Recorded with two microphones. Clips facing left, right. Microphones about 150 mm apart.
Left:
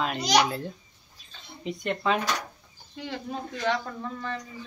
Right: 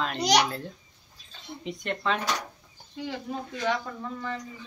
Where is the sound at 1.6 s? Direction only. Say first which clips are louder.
Left 3 dB; 5° left (ahead or behind).